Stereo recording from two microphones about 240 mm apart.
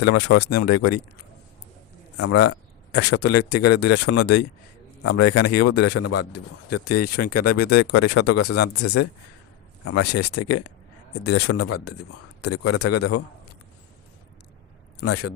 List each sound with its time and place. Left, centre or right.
0.0 s a man's voice: left
2.1 s a man's voice: left
7.3 s speech: left
7.7 s a man's voice: left
15.0 s speech: left